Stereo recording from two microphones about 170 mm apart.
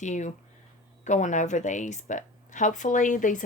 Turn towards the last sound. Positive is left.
turn(degrees=50)  # may be behind; listen again after turning